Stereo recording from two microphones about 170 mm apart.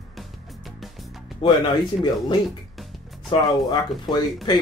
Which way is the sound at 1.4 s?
30° left (ahead or behind).